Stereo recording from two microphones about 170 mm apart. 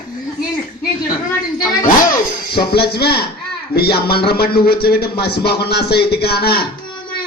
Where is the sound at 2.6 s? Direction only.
70° left (ahead or behind).